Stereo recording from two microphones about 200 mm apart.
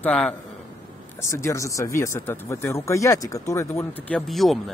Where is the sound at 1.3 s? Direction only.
15° left (ahead or behind).